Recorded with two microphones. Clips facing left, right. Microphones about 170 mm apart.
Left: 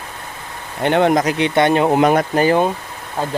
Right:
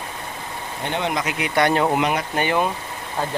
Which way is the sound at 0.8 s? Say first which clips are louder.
Left 10 dB; 65° left (ahead or behind).